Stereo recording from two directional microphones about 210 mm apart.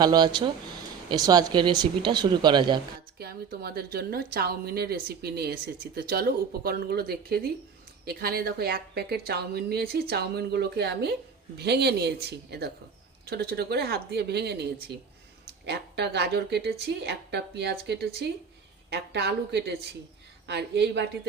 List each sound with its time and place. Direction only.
0.0 s speech: 20° right (ahead or behind)
3.2 s a woman's voice: 50° right (ahead or behind)